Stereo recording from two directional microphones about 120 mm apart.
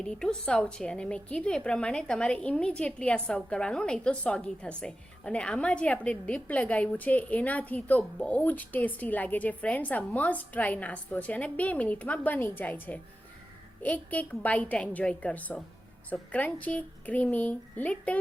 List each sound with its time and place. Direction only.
0.0 s a woman's voice: 5° left (ahead or behind)